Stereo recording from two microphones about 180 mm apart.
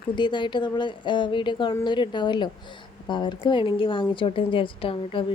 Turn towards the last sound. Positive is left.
turn(degrees=30)  # may be behind; listen again after turning